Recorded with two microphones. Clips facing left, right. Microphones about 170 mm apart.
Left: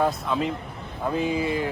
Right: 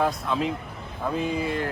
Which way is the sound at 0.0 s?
Centre (ahead or behind).